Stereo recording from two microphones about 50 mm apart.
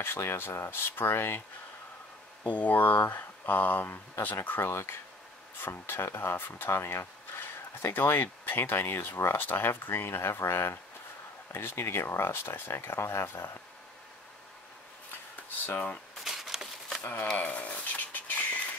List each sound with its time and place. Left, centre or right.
0.0 s speech: left
2.5 s speech: left
4.4 s speech: left
5.6 s speech: left
6.7 s speech: left
9.4 s speech: left
16.3 s a sound: centre
17.4 s patter: left